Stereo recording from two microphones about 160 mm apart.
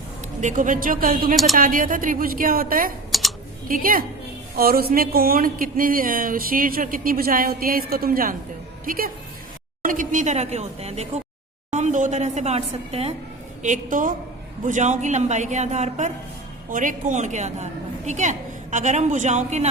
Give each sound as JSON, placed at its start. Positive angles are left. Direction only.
{"t": 0.4, "sound": "speech", "side_deg": -55}
{"t": 3.1, "sound": "computer keyboard", "side_deg": 0}
{"t": 3.7, "sound": "a woman's voice", "side_deg": -60}
{"t": 13.6, "sound": "a woman's voice", "side_deg": -55}